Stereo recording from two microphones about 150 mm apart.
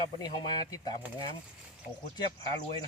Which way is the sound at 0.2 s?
25° left (ahead or behind).